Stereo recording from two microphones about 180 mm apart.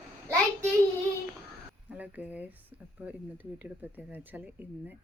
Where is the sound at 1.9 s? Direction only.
10° right (ahead or behind).